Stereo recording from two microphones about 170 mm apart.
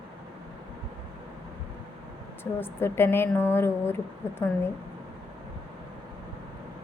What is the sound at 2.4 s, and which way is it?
A woman's voice, 15° left (ahead or behind).